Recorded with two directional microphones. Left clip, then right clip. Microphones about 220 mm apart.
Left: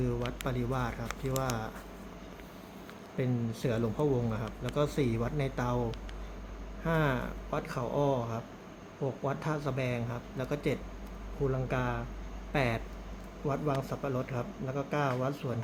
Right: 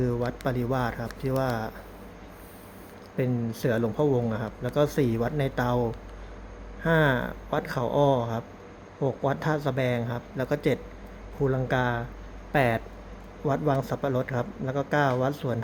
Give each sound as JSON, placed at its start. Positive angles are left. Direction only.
{"t": 0.0, "sound": "speech", "side_deg": -15}
{"t": 3.2, "sound": "speech", "side_deg": -15}